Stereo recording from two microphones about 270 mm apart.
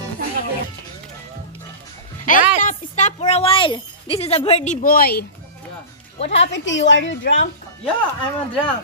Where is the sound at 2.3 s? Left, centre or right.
Left.